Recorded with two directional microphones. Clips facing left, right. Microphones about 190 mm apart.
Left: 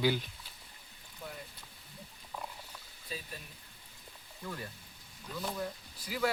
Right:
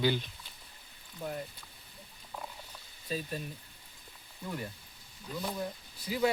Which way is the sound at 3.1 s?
45° right (ahead or behind).